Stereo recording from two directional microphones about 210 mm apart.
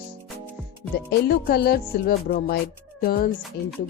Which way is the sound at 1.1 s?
50° left (ahead or behind).